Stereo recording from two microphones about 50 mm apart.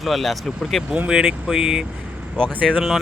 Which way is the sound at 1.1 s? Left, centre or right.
Centre.